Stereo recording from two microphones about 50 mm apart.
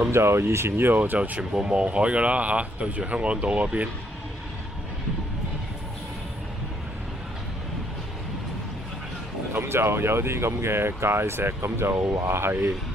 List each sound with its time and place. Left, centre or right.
0.1 s speech: right
0.9 s speech: right
1.5 s speech: right
9.6 s speech: right